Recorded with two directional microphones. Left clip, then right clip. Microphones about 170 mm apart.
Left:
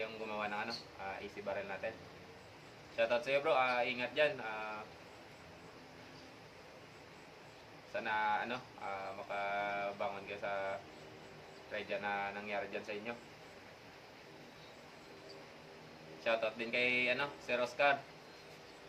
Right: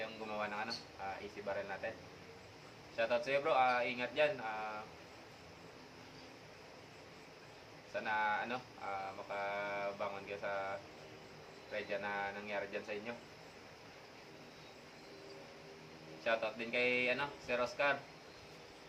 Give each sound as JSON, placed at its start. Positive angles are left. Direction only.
{"t": 0.0, "sound": "a sound", "side_deg": 15}
{"t": 1.5, "sound": "speech", "side_deg": 15}
{"t": 2.9, "sound": "speech", "side_deg": 15}
{"t": 7.9, "sound": "speech", "side_deg": 15}
{"t": 16.2, "sound": "speech", "side_deg": 15}